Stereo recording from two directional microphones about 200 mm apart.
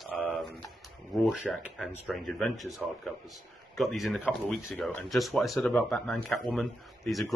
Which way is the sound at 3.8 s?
Centre (ahead or behind).